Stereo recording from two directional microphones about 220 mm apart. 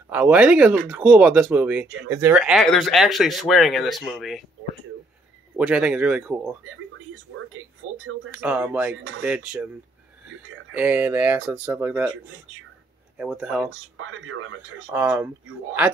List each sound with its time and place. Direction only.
0.1 s speech: 5° right (ahead or behind)
5.6 s speech: 5° right (ahead or behind)
8.4 s speech: 5° right (ahead or behind)
10.7 s speech: 5° right (ahead or behind)
13.2 s speech: 5° right (ahead or behind)
13.9 s speech: 70° right (ahead or behind)
14.9 s speech: 10° right (ahead or behind)